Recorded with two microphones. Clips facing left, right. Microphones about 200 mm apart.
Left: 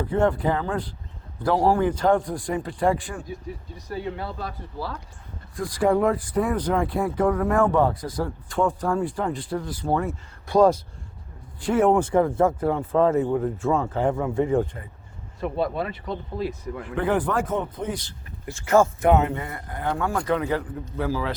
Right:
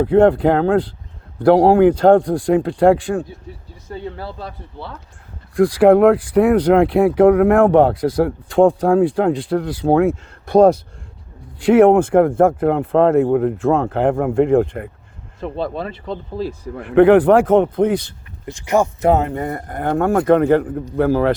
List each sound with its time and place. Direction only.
0.0 s speech: 65° right (ahead or behind)
1.5 s speech: 90° right
4.2 s a man's voice: 30° right (ahead or behind)
5.5 s speech: 85° right; by 10.8 s 65° right (ahead or behind)
11.6 s speech: 85° right
12.2 s speech: 50° right (ahead or behind)
14.6 s speech: 65° right (ahead or behind)
15.6 s speech: 30° right (ahead or behind)
16.8 s speech: 70° right (ahead or behind)
18.4 s speech: 15° right (ahead or behind)
19.0 s speech: 35° right (ahead or behind); by 21.3 s 60° right (ahead or behind)